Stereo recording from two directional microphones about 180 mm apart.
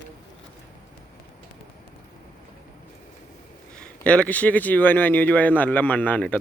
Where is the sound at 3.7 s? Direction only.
5° left (ahead or behind).